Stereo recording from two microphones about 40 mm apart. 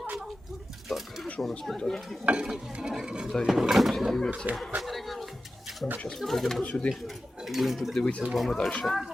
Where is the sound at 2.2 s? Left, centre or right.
Right.